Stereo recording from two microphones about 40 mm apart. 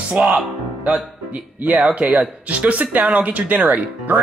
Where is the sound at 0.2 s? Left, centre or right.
Right.